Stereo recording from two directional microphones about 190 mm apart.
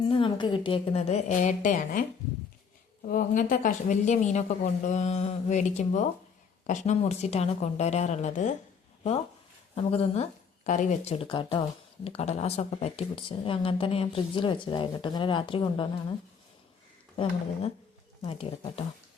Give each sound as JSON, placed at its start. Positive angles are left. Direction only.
{"t": 0.1, "sound": "speech", "side_deg": 25}
{"t": 9.7, "sound": "speech", "side_deg": 30}
{"t": 18.2, "sound": "speech", "side_deg": 30}